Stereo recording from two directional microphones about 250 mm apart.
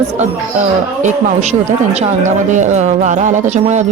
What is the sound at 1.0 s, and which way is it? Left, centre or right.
Speech, right.